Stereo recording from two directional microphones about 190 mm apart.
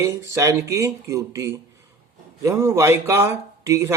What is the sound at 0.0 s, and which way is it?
Speech, 15° right (ahead or behind).